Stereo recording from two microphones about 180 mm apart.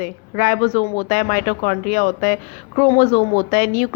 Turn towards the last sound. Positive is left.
turn(degrees=55)  # may be behind; listen again after turning